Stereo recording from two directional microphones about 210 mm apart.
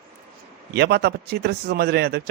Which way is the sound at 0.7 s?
50° right (ahead or behind).